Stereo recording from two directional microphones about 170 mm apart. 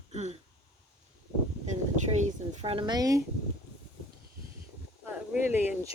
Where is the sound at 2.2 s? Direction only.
35° right (ahead or behind).